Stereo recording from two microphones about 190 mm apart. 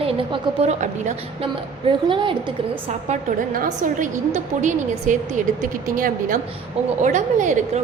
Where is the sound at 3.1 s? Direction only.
45° right (ahead or behind).